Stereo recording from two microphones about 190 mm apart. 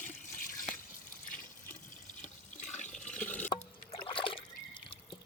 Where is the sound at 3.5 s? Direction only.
25° left (ahead or behind).